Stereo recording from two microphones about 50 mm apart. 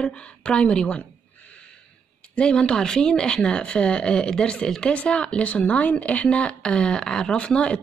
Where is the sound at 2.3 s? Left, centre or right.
Left.